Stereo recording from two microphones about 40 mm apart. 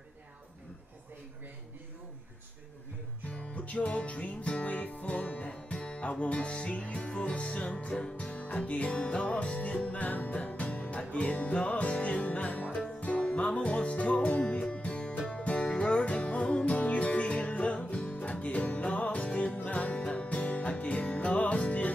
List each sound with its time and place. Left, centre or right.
3.3 s music: left
13.0 s music: left